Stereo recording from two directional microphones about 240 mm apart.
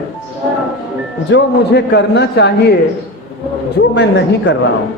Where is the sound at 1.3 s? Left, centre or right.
Left.